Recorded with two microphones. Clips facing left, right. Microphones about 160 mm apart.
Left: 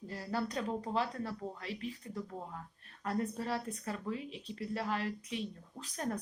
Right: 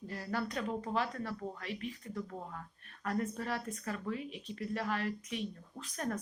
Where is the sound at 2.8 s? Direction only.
30° left (ahead or behind).